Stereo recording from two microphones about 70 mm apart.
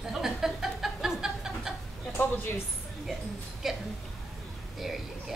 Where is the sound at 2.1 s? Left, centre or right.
Left.